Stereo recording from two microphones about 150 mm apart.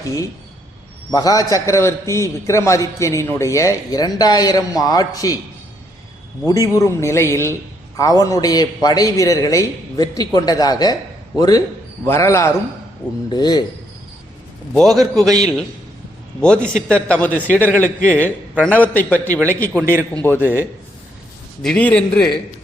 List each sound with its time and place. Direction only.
1.1 s a man's voice: 25° left (ahead or behind)
6.4 s a man's voice: 20° left (ahead or behind)
14.7 s a man's voice: 5° left (ahead or behind)
16.4 s a man's voice: 5° left (ahead or behind)
21.6 s a man's voice: 5° left (ahead or behind)